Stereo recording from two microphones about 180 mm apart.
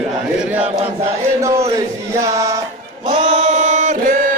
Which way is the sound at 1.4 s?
15° right (ahead or behind).